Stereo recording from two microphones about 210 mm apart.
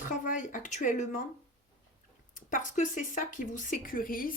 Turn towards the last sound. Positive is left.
turn(degrees=40)  # may be behind; listen again after turning